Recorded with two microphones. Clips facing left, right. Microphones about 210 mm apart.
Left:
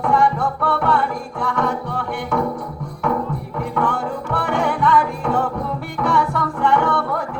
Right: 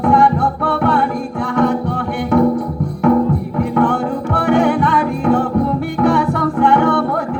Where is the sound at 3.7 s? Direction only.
60° right (ahead or behind).